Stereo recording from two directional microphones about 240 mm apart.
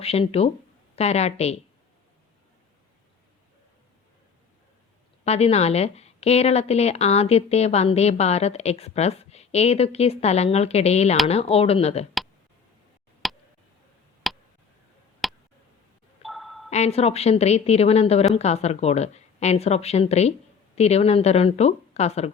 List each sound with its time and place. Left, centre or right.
0.0 s a woman's voice: left
5.2 s a woman's voice: left
13.2 s tick: centre
14.3 s a sound: centre
16.6 s a woman's voice: left